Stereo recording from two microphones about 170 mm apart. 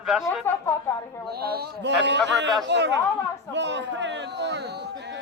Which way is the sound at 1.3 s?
65° right (ahead or behind).